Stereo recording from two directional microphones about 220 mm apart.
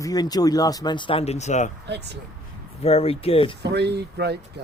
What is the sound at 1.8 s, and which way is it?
Speech, 50° right (ahead or behind).